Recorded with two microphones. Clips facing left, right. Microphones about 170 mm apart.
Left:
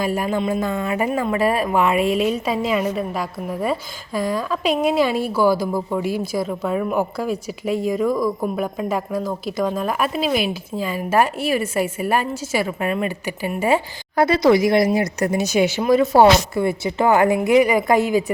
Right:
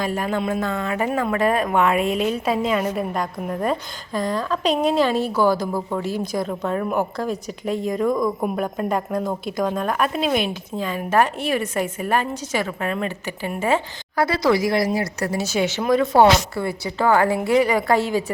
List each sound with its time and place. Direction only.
0.0 s speech: 10° left (ahead or behind)
16.6 s speech: 20° left (ahead or behind)